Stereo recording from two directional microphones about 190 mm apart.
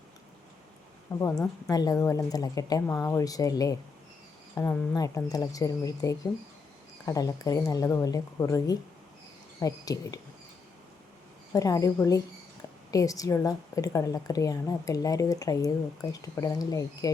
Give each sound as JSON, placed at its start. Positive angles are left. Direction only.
{"t": 1.1, "sound": "a woman's voice", "side_deg": 15}
{"t": 11.5, "sound": "a woman's voice", "side_deg": 20}